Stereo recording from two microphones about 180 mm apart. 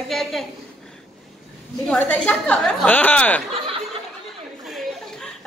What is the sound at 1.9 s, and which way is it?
A woman's voice, 5° left (ahead or behind).